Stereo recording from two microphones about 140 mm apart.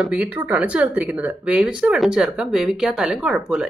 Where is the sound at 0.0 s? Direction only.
10° right (ahead or behind).